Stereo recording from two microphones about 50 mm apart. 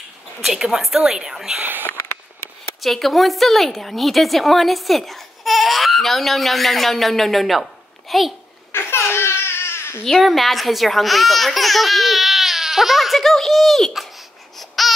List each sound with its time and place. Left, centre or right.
0.4 s a woman's voice: centre
1.6 s speech: right
2.8 s a woman's voice: centre
9.1 s baby cry: left
10.0 s a woman's voice: centre
14.8 s baby cry: centre